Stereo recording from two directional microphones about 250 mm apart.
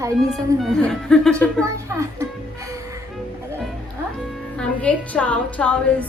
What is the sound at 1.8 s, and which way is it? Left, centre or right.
Speech, centre.